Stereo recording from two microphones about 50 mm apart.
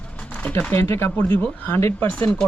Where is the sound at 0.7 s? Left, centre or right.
Left.